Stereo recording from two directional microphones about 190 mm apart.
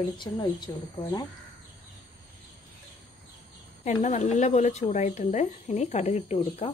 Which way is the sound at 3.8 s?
40° left (ahead or behind).